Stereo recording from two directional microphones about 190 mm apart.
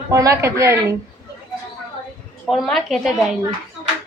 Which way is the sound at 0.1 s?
15° right (ahead or behind).